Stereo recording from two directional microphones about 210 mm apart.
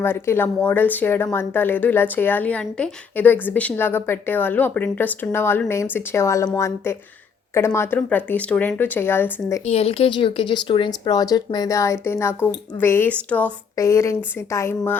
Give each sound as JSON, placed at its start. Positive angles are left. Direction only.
{"t": 0.0, "sound": "speech", "side_deg": 10}
{"t": 9.6, "sound": "speech", "side_deg": 30}